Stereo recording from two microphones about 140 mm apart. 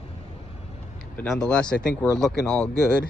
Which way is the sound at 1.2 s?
5° left (ahead or behind).